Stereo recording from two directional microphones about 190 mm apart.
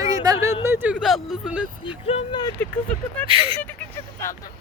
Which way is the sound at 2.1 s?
25° left (ahead or behind).